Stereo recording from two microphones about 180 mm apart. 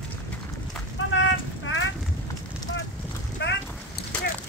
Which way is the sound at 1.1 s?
90° left.